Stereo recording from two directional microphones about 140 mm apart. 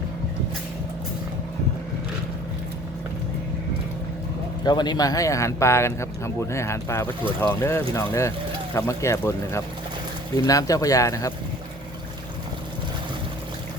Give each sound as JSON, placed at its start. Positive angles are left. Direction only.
{"t": 4.6, "sound": "speech", "side_deg": 30}